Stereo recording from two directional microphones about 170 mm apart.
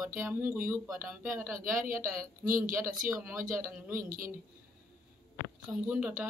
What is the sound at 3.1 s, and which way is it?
Speech, 15° right (ahead or behind).